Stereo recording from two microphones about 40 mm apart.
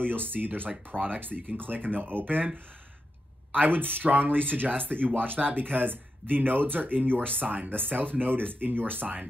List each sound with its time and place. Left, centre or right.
0.0 s speech: right